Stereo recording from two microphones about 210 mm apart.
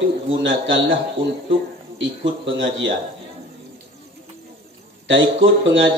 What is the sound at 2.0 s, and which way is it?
Speech, 60° right (ahead or behind).